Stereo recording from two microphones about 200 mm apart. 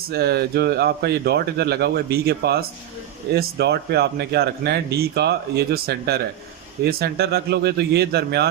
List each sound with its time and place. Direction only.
0.1 s speech: 55° right (ahead or behind)